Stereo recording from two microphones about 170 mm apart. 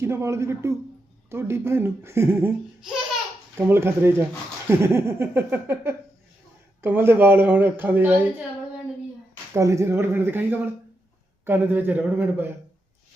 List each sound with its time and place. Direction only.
0.0 s speech: 15° right (ahead or behind)
3.7 s speech: 15° right (ahead or behind)
9.6 s speech: 15° right (ahead or behind)